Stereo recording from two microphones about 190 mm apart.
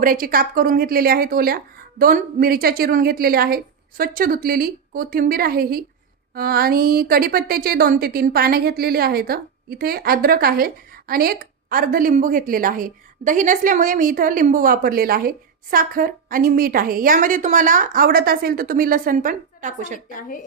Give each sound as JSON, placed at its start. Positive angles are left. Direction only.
{"t": 0.0, "sound": "a woman's voice", "side_deg": -50}
{"t": 20.1, "sound": "speech", "side_deg": 45}